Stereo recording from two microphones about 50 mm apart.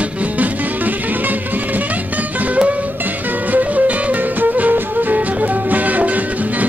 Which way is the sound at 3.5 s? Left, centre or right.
Right.